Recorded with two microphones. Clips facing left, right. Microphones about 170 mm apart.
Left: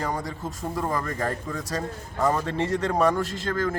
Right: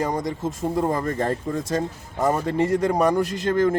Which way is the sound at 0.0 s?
20° right (ahead or behind).